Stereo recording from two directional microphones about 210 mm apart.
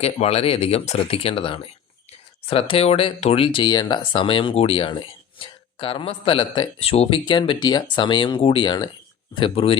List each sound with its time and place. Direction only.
0.0 s a man's voice: 30° left (ahead or behind)